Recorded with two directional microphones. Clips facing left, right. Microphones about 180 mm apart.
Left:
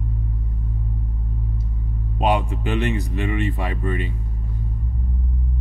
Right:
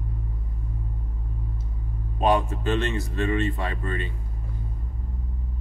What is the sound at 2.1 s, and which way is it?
Speech, 15° left (ahead or behind).